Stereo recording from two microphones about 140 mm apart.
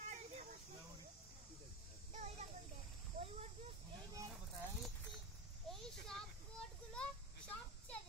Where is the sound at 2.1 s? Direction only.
55° right (ahead or behind).